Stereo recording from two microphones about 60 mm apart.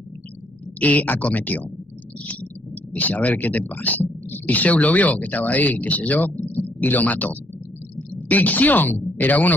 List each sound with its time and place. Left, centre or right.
0.7 s speech: left